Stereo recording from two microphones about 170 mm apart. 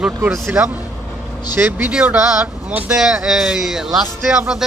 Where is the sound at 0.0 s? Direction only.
5° right (ahead or behind).